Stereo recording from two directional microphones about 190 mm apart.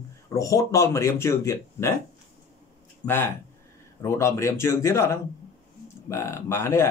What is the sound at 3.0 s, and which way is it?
Speech, 10° left (ahead or behind).